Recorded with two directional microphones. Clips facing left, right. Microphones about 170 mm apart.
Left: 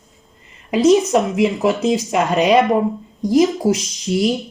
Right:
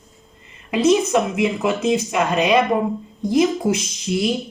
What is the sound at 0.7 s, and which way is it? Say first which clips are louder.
A woman's voice: left 3 dB; 40° left (ahead or behind).